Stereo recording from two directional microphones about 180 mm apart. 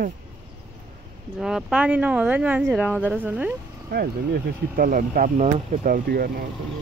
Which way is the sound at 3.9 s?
60° right (ahead or behind).